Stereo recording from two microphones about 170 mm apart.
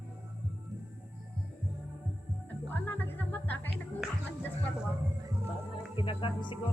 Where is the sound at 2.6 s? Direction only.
10° left (ahead or behind).